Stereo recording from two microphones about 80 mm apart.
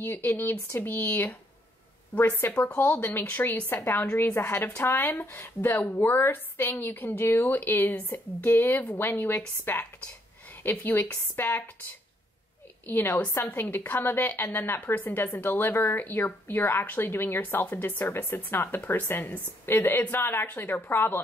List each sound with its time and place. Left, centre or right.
0.0 s a woman's voice: left
8.5 s a woman's voice: left
12.8 s a woman's voice: left